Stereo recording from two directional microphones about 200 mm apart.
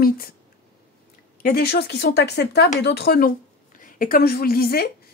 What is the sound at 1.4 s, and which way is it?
A woman's voice, 50° left (ahead or behind).